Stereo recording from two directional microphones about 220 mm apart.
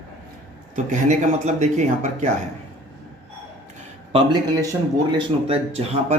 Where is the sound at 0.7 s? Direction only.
35° right (ahead or behind).